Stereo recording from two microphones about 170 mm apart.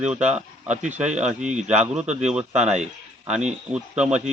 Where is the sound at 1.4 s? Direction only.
45° right (ahead or behind).